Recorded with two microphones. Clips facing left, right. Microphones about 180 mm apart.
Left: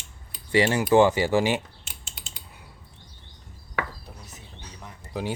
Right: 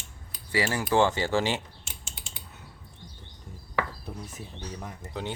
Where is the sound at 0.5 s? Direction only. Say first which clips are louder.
Left 6 dB; 20° left (ahead or behind).